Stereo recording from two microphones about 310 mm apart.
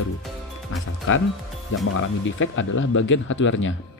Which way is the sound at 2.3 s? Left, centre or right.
Left.